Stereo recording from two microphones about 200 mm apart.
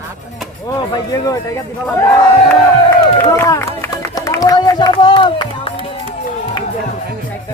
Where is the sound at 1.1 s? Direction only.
15° left (ahead or behind).